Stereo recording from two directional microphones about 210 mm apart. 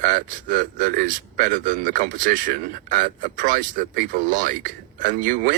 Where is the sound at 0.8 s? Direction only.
40° right (ahead or behind).